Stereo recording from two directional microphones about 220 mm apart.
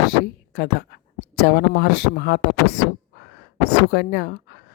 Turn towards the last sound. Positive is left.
turn(degrees=50)  # may be behind; listen again after turning